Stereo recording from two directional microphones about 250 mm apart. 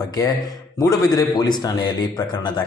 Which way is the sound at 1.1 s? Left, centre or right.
Centre.